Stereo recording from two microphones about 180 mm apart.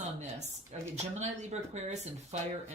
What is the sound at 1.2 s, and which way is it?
Speech, 40° right (ahead or behind).